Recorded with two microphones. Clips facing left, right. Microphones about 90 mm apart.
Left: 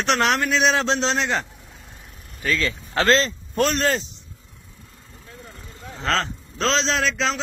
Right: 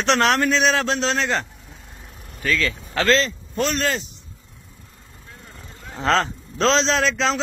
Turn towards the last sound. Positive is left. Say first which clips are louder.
# right 2 dB
turn(degrees=0)  # may be behind; listen again after turning